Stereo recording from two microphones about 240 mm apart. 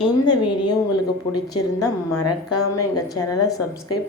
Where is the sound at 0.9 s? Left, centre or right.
Left.